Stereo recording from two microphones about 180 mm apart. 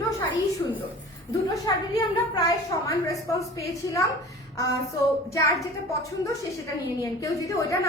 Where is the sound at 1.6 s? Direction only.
20° left (ahead or behind).